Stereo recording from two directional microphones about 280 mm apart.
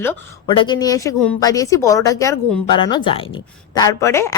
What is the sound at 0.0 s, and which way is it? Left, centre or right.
Speech, centre.